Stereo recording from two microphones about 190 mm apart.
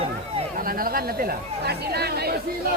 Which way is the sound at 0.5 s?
50° right (ahead or behind).